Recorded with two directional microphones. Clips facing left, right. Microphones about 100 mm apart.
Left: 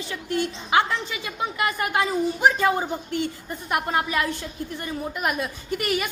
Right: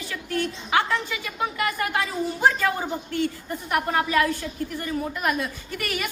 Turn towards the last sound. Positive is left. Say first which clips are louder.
# left 5 dB
turn(degrees=20)  # may be behind; listen again after turning